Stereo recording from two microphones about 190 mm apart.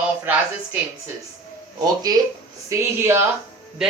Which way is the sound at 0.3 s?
10° right (ahead or behind).